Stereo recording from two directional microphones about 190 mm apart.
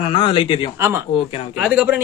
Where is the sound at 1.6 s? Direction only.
10° right (ahead or behind).